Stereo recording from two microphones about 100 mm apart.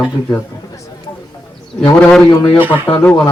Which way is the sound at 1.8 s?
15° left (ahead or behind).